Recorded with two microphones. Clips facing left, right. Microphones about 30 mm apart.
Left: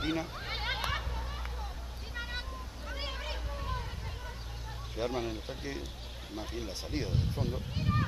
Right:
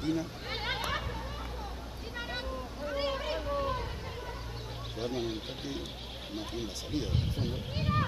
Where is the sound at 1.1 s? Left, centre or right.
Centre.